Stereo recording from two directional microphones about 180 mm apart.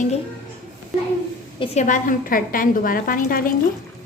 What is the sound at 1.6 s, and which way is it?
A woman's voice, 40° left (ahead or behind).